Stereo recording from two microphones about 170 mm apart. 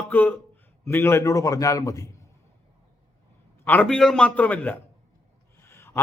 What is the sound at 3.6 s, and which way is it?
A man's voice, 5° left (ahead or behind).